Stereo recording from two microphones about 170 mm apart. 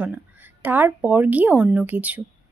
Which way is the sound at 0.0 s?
10° right (ahead or behind).